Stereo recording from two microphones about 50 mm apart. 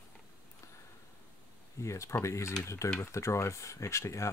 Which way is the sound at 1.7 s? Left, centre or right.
Left.